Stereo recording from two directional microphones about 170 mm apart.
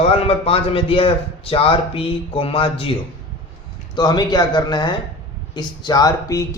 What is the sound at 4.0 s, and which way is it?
A man's voice, 25° left (ahead or behind).